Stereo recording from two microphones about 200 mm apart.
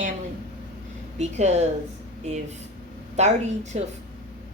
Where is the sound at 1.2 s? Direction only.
35° right (ahead or behind).